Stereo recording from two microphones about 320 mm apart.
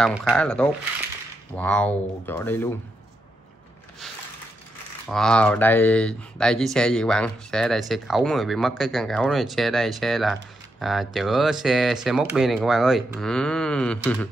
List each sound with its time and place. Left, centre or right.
0.0 s speech: centre
5.0 s speech: centre